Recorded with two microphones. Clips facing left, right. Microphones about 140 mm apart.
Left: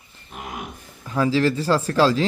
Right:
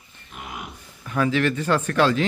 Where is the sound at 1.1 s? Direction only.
25° left (ahead or behind).